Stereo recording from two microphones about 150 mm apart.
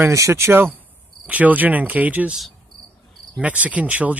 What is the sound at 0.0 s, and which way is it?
Speech, 20° right (ahead or behind).